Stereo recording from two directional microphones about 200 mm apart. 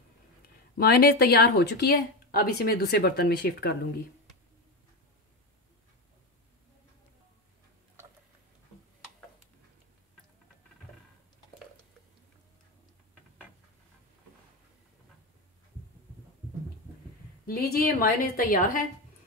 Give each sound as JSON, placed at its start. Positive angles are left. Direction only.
{"t": 0.7, "sound": "speech", "side_deg": 50}
{"t": 17.5, "sound": "speech", "side_deg": 50}